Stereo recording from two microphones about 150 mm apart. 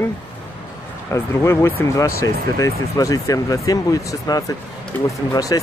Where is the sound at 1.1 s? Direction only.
20° left (ahead or behind).